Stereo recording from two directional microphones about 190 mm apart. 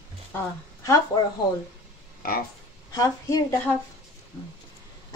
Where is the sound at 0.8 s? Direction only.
15° left (ahead or behind).